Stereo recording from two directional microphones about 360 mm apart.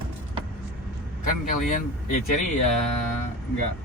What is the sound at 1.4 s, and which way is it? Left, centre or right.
Vehicle, left.